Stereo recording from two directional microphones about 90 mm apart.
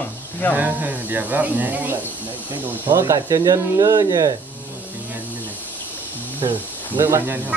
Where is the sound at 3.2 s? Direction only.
50° right (ahead or behind).